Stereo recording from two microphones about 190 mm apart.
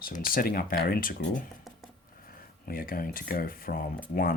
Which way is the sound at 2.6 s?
50° left (ahead or behind).